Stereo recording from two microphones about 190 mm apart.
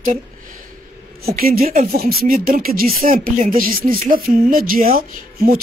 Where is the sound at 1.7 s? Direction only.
50° right (ahead or behind).